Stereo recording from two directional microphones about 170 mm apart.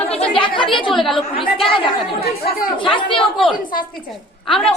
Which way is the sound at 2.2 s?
65° left (ahead or behind).